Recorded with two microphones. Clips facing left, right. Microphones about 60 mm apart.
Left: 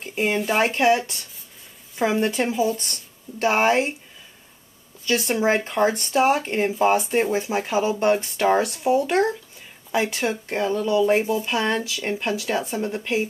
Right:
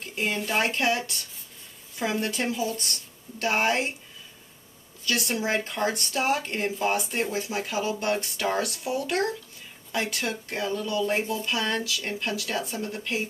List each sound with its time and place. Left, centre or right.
0.0 s a sound: centre
0.5 s speech: centre
2.2 s speech: centre
5.3 s speech: left
5.6 s speech: centre
7.3 s speech: left